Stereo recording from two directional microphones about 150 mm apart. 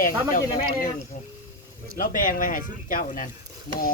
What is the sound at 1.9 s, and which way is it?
Speech, 65° left (ahead or behind).